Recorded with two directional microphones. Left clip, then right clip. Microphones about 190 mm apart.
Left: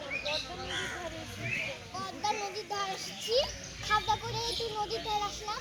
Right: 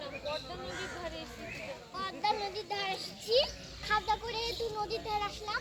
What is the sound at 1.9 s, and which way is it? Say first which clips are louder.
Children playing: right 2 dB; centre (ahead or behind).